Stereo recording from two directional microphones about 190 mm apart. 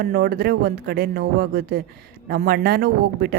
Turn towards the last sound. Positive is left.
turn(degrees=-55)  # may be behind; listen again after turning